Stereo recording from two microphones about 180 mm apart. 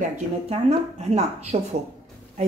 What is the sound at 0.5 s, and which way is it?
Speech, 35° right (ahead or behind).